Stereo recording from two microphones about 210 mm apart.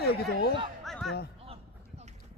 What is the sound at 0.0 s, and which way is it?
Speech, 50° left (ahead or behind).